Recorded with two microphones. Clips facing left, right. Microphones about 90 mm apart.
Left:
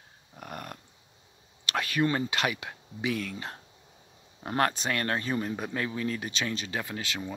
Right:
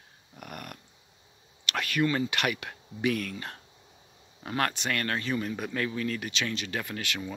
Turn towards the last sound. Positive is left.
turn(degrees=25)  # may be behind; listen again after turning